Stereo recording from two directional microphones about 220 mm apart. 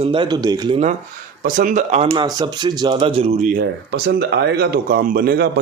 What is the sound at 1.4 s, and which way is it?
Speech, 35° right (ahead or behind).